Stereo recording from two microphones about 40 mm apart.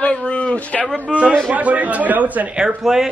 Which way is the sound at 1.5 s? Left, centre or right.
Right.